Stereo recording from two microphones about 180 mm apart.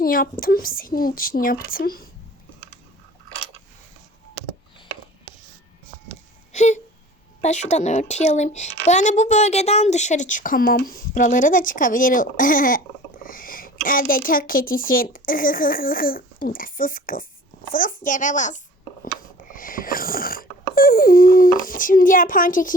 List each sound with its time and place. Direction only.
0.0 s speech: 55° left (ahead or behind)
6.5 s a sound: 40° left (ahead or behind)
7.4 s a woman's voice: 40° left (ahead or behind)
19.5 s wheeze: 50° left (ahead or behind)